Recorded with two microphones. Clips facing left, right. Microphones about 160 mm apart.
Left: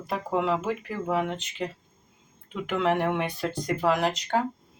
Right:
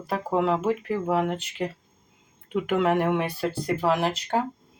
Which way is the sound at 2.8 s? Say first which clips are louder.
Right 1 dB; 5° right (ahead or behind).